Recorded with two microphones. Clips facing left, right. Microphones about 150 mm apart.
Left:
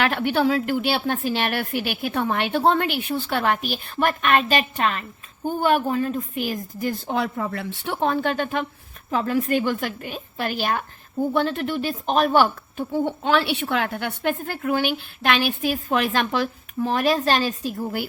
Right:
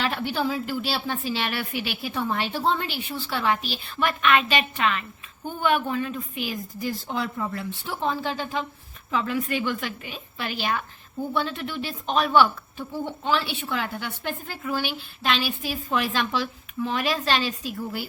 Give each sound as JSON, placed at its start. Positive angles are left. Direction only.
{"t": 0.0, "sound": "a woman's voice", "side_deg": 60}
{"t": 9.0, "sound": "speech", "side_deg": 45}